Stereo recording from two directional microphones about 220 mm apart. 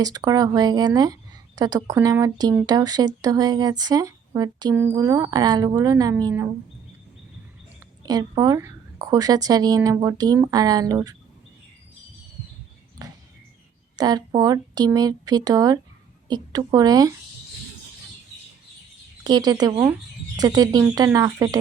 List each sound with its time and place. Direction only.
0.0 s speech: 15° right (ahead or behind)
8.0 s speech: 15° right (ahead or behind)
13.0 s a sound: 15° right (ahead or behind)
13.9 s speech: 15° right (ahead or behind)
19.2 s speech: 20° right (ahead or behind)